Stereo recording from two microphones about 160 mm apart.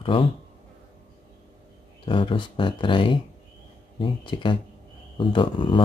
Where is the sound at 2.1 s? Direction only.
30° left (ahead or behind).